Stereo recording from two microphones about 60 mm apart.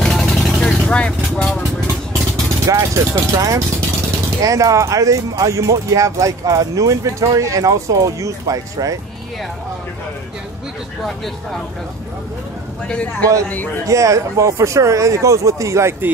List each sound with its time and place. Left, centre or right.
0.1 s vehicle: centre
0.8 s vehicle: centre
2.6 s vehicle: right
4.4 s speech: right
12.8 s a man's voice: centre
13.8 s speech: right